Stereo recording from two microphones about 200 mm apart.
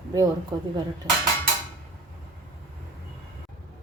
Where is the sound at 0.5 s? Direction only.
20° right (ahead or behind).